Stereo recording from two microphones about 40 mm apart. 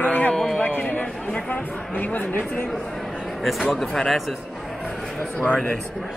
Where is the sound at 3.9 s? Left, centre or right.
Centre.